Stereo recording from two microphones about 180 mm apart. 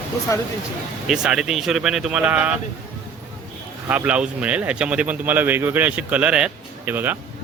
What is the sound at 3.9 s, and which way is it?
Speech, 10° right (ahead or behind).